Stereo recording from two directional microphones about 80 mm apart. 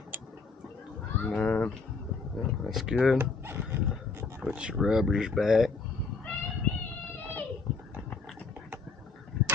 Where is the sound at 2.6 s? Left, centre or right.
Centre.